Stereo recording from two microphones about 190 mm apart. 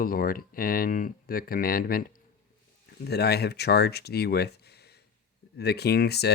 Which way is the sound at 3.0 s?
60° left (ahead or behind).